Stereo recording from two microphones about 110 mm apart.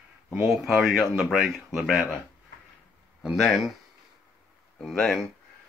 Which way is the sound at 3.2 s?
Centre (ahead or behind).